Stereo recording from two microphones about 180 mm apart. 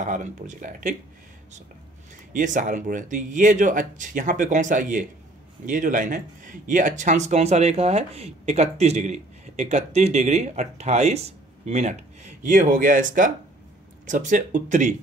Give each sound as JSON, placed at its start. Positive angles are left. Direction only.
{"t": 0.0, "sound": "speech", "side_deg": -45}
{"t": 2.3, "sound": "speech", "side_deg": -45}